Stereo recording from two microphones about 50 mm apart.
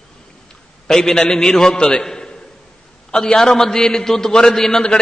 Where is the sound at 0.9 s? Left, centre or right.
Centre.